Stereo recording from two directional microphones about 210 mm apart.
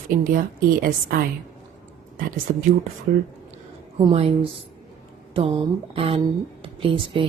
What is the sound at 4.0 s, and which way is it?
Speech, 25° right (ahead or behind).